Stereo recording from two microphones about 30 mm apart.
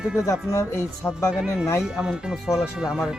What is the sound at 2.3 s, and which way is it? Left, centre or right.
Speech, centre.